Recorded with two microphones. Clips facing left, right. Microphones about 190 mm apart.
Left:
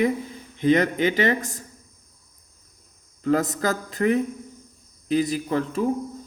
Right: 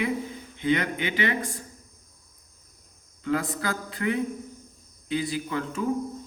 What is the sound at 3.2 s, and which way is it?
Speech, 40° left (ahead or behind).